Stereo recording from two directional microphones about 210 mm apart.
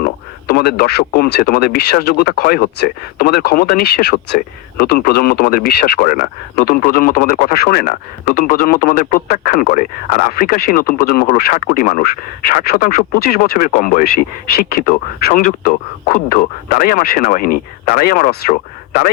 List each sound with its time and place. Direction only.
0.0 s speech: 45° left (ahead or behind)